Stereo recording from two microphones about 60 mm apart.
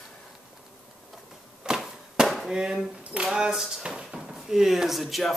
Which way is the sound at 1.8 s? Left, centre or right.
Centre.